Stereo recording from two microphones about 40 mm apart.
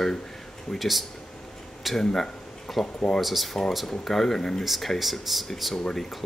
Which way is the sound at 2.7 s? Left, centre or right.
Centre.